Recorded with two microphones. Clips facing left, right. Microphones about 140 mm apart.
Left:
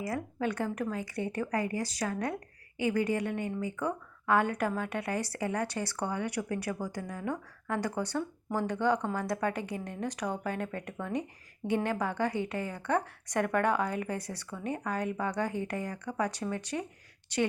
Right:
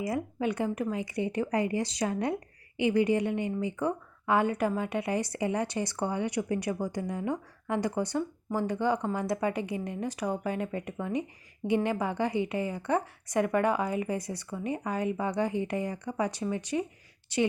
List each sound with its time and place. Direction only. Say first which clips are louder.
0.0 s speech: right 3 dB; 15° right (ahead or behind)